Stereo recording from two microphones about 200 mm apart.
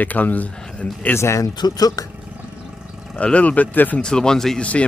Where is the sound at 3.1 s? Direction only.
5° left (ahead or behind).